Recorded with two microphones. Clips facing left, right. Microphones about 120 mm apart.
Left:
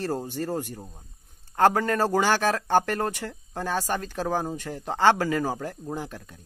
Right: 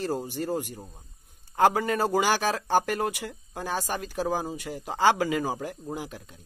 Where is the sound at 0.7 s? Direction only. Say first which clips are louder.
Left 1 dB; 10° left (ahead or behind).